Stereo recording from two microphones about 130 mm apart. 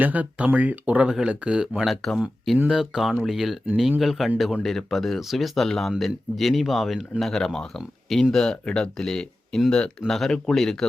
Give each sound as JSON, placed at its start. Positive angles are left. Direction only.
{"t": 0.0, "sound": "speech", "side_deg": -10}